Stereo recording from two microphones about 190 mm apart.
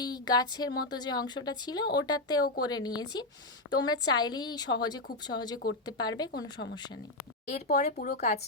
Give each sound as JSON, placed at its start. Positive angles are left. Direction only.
{"t": 0.0, "sound": "a woman's voice", "side_deg": 20}
{"t": 7.5, "sound": "speech", "side_deg": 40}